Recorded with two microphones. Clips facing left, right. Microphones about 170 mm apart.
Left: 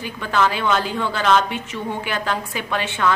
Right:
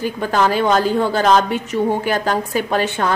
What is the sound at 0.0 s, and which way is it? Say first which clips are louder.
A woman's voice: right 3 dB; 40° right (ahead or behind).